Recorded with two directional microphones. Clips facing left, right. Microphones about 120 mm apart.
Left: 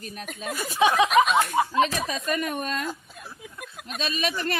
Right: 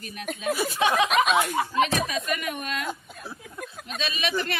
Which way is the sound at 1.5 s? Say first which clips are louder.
Left 1 dB; 30° left (ahead or behind).